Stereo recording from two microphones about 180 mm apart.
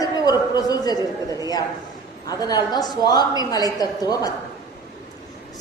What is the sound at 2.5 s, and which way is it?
A woman's voice, 20° left (ahead or behind).